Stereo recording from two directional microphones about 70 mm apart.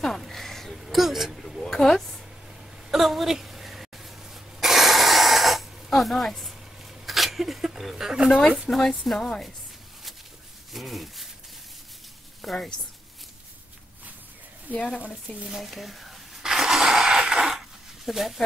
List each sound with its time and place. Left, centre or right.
0.0 s a sound: centre
8.3 s speech: centre
10.7 s rub: centre
12.4 s speech: centre
14.7 s speech: right
15.3 s a sound: centre